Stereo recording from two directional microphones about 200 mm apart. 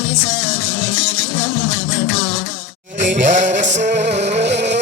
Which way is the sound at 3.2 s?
40° right (ahead or behind).